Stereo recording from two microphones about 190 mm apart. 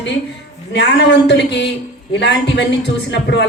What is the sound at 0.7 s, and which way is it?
Speech, 65° left (ahead or behind).